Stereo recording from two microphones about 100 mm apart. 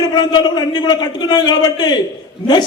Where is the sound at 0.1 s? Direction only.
45° left (ahead or behind).